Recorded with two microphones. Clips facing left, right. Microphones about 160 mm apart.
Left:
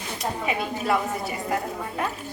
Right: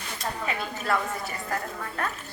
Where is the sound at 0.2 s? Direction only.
20° left (ahead or behind).